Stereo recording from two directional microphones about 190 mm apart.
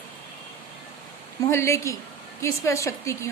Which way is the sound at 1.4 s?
15° left (ahead or behind).